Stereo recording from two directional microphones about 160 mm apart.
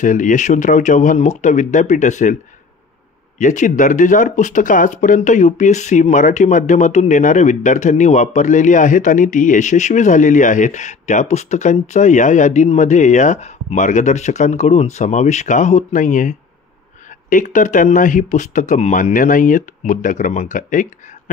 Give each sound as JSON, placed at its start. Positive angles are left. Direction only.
{"t": 0.0, "sound": "speech", "side_deg": 55}
{"t": 3.3, "sound": "speech", "side_deg": 50}